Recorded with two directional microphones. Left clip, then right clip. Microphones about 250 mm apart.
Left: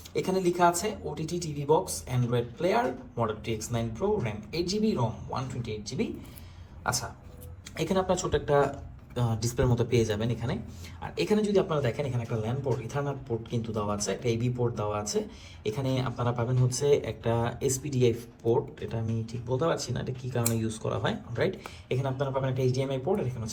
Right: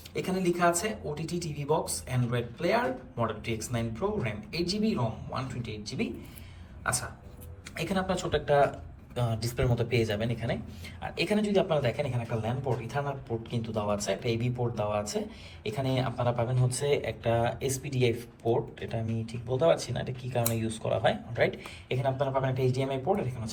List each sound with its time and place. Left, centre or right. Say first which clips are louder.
0.1 s speech: left 3 dB; centre
7.8 s speech: left 3 dB; centre